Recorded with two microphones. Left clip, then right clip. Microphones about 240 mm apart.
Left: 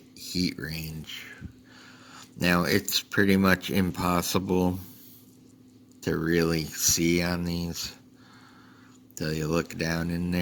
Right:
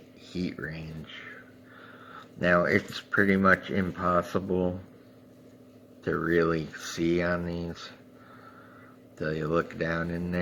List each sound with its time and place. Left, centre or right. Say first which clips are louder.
0.3 s speech: left 4 dB; left
6.0 s speech: even; left
9.1 s speech: right 1 dB; left